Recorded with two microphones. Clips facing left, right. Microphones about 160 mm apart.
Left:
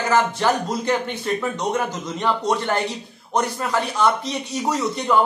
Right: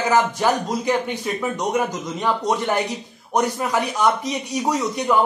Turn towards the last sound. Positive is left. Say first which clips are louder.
# right 1 dB
turn(degrees=-10)  # may be behind; listen again after turning